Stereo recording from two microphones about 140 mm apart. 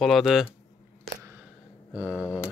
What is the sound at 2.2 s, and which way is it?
Mantra, 20° left (ahead or behind).